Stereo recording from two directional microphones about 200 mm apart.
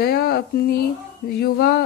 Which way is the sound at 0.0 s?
50° left (ahead or behind).